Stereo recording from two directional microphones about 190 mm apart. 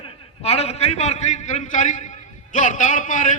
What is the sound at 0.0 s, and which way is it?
A man's voice, 30° left (ahead or behind).